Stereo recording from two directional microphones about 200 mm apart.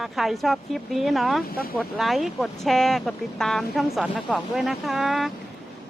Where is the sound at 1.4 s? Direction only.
50° left (ahead or behind).